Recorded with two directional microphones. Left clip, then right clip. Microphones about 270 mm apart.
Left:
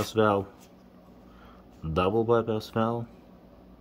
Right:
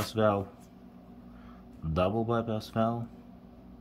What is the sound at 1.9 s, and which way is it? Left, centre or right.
A man's voice, centre.